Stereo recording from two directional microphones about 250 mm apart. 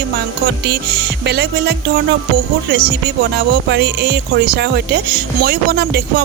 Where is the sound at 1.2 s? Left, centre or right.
Right.